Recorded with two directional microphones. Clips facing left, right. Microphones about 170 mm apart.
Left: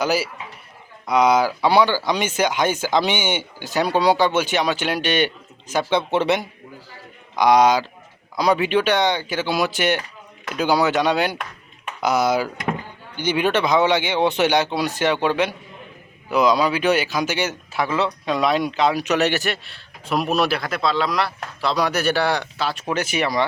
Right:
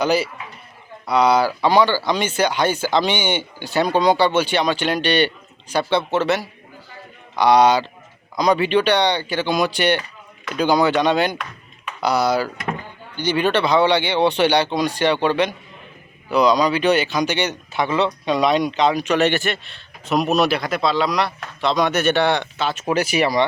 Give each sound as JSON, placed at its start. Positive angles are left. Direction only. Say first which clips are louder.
{"t": 0.0, "sound": "speech", "louder": "right 2 dB", "side_deg": 5}